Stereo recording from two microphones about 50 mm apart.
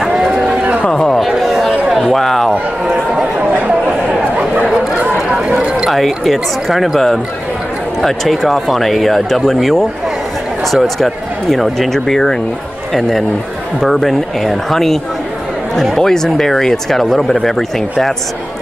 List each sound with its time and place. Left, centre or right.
0.8 s a sound: centre
1.4 s chatter: centre
2.1 s a sound: centre
3.2 s chatter: right
5.6 s a sound: right
5.9 s speech: centre
8.0 s speech: centre
11.9 s speech: centre
13.7 s speech: centre